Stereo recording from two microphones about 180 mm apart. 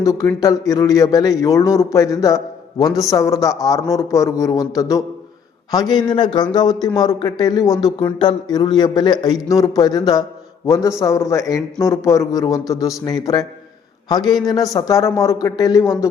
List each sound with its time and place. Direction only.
0.0 s speech: 20° left (ahead or behind)